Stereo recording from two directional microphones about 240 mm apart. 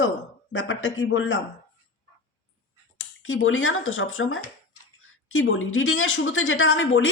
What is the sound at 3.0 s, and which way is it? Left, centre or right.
Speech, left.